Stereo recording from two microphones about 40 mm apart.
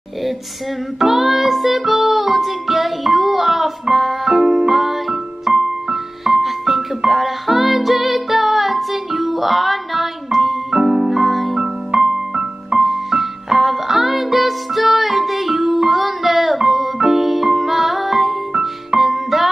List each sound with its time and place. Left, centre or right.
0.9 s music: centre
11.6 s piano: centre
12.8 s music: centre